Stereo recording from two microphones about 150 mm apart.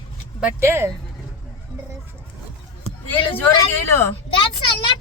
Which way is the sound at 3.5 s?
15° left (ahead or behind).